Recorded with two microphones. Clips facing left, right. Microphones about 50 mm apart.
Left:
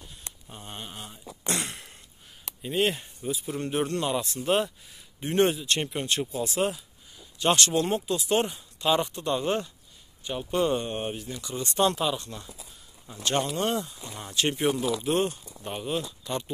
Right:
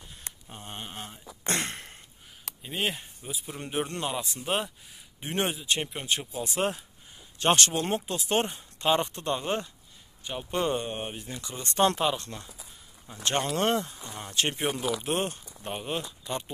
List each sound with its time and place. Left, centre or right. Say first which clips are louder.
0.5 s speech: even; right
1.4 s a sound: right 1 dB; right
2.6 s speech: left 5 dB; centre
5.8 s speech: left 3 dB; centre
6.4 s speech: left 2 dB; right
8.8 s speech: left 1 dB; right
9.4 s speech: left 3 dB; centre
10.7 s speech: left 2 dB; centre
11.1 s speech: left 4 dB; right
13.6 s speech: right 1 dB; right
14.3 s speech: left 3 dB; right